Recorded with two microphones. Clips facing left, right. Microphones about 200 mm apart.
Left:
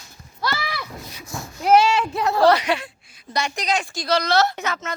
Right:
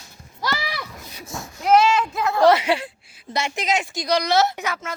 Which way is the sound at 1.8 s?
30° left (ahead or behind).